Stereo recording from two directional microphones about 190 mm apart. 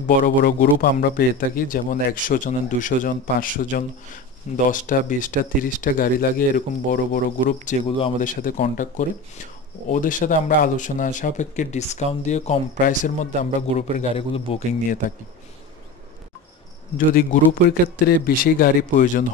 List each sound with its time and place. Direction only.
0.0 s speech: 45° left (ahead or behind); by 14.8 s 30° left (ahead or behind)
16.9 s speech: 45° left (ahead or behind)